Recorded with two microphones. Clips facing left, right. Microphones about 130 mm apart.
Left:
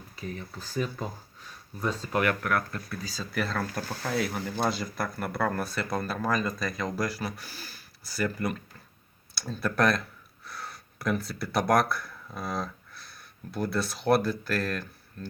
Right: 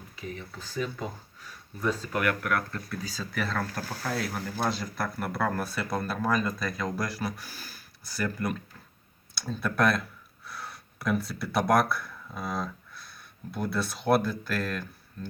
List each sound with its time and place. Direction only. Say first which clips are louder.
0.2 s speech: left 1 dB; 40° left (ahead or behind); by 2.6 s 25° left (ahead or behind)
3.0 s speech: left 2 dB; centre (ahead or behind)